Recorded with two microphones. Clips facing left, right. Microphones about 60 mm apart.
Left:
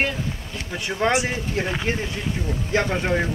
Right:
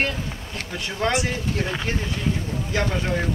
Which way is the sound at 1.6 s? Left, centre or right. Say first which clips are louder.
Left 4 dB; left.